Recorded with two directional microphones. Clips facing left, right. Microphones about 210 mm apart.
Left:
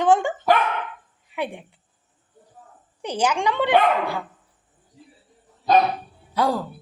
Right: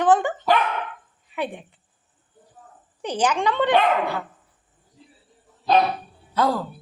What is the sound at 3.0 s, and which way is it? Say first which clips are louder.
A woman's voice: even; 10° left (ahead or behind).